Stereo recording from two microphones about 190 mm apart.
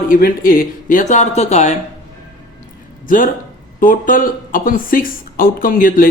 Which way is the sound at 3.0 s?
45° left (ahead or behind).